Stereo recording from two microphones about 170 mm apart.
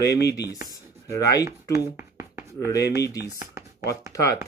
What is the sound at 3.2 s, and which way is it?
Speech, 15° right (ahead or behind).